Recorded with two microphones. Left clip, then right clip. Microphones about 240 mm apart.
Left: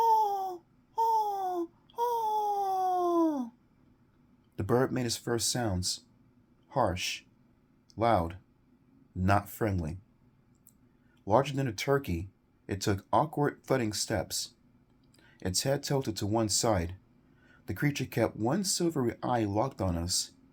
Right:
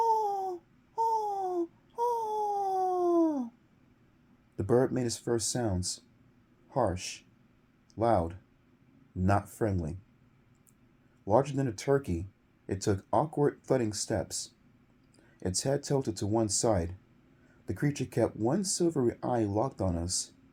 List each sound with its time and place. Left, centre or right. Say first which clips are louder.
0.0 s a sound: left 2 dB; left
4.5 s speech: right 1 dB; left
11.3 s speech: even; left